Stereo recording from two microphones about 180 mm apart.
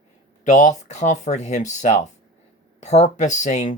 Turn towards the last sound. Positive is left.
turn(degrees=40)  # may be behind; listen again after turning